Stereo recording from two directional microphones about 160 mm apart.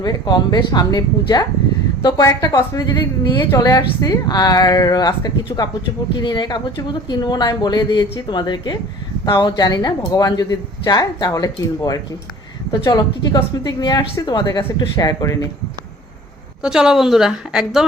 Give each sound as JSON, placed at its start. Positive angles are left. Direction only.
{"t": 0.0, "sound": "speech", "side_deg": 25}
{"t": 16.6, "sound": "a woman's voice", "side_deg": -5}